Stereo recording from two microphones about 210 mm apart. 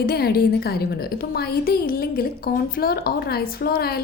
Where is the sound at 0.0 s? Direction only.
45° left (ahead or behind).